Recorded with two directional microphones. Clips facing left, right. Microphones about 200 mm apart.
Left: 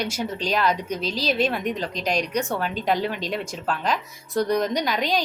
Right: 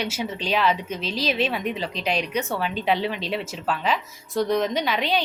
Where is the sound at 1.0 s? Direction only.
40° left (ahead or behind).